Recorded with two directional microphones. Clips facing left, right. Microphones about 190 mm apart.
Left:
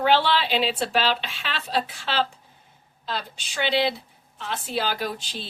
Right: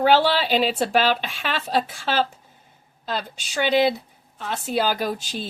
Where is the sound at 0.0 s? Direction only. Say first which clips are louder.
Right 3 dB; 45° right (ahead or behind).